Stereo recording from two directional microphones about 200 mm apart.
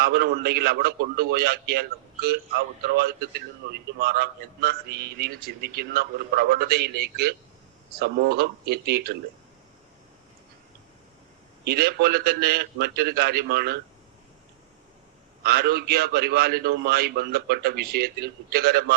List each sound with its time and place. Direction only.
0.0 s a man's voice: 50° right (ahead or behind)
11.6 s a man's voice: 50° right (ahead or behind)
15.4 s a man's voice: 50° right (ahead or behind)